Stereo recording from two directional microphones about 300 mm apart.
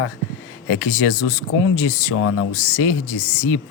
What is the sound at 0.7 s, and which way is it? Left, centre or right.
Speech, left.